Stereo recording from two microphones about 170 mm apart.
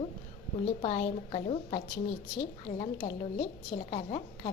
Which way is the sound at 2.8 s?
40° left (ahead or behind).